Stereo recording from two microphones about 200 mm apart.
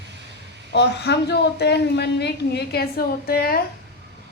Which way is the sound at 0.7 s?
60° left (ahead or behind).